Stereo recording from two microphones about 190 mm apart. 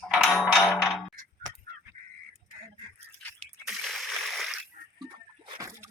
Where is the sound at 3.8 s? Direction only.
Centre (ahead or behind).